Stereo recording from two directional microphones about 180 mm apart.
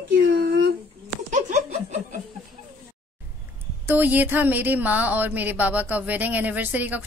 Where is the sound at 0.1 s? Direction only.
90° right.